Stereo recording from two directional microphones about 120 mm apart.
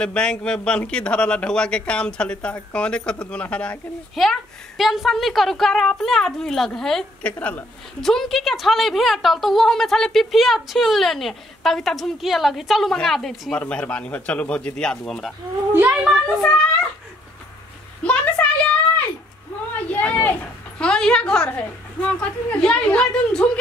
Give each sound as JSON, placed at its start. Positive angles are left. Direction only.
{"t": 0.0, "sound": "a man's voice", "side_deg": 10}
{"t": 7.3, "sound": "a man's voice", "side_deg": 15}
{"t": 8.0, "sound": "a woman's voice", "side_deg": 0}
{"t": 15.7, "sound": "a child's voice", "side_deg": -15}
{"t": 18.0, "sound": "a sound", "side_deg": 10}
{"t": 19.7, "sound": "a man's voice", "side_deg": 15}